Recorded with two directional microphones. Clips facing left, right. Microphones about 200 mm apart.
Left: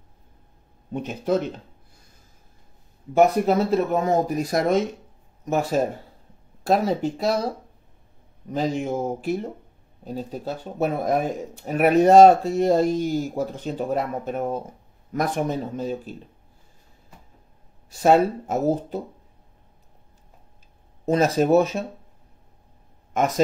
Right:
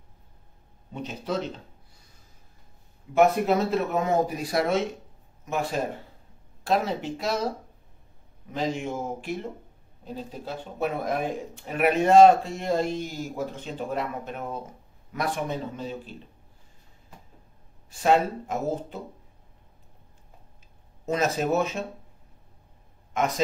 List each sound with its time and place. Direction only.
0.9 s speech: 50° left (ahead or behind)
3.2 s speech: 35° left (ahead or behind)
8.5 s speech: 40° left (ahead or behind)
17.8 s speech: 40° left (ahead or behind)
21.0 s speech: 35° left (ahead or behind)
23.1 s speech: 45° left (ahead or behind)